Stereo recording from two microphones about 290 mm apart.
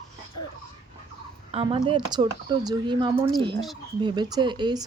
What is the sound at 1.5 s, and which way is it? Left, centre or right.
Speech, centre.